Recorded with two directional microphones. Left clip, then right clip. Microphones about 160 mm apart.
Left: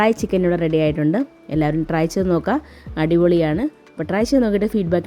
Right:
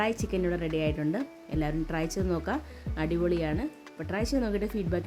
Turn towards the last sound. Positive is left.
turn(degrees=30)  # may be behind; listen again after turning